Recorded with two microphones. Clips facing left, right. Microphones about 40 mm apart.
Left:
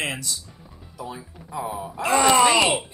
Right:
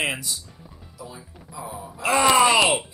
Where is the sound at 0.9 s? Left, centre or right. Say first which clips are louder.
Left 6 dB; left.